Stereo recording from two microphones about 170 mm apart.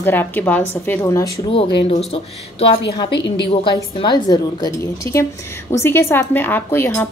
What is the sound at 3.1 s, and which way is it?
Speech, 90° left.